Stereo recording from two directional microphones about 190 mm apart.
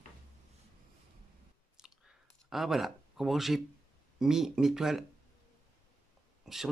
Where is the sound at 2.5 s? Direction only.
Centre (ahead or behind).